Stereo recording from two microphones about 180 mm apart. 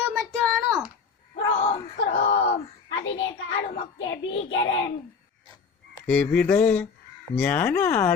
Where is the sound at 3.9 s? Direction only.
90° left.